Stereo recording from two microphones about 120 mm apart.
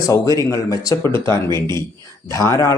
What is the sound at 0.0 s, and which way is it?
Speech, 30° left (ahead or behind).